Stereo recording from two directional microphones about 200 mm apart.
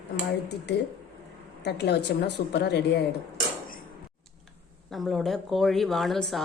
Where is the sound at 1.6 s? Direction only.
55° left (ahead or behind).